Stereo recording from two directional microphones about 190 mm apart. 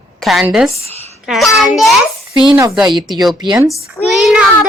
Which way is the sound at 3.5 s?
5° right (ahead or behind).